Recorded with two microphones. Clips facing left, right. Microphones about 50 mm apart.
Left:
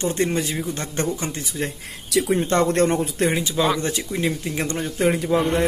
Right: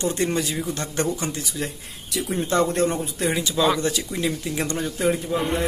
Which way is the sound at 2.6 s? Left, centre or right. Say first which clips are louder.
Left 3 dB; left.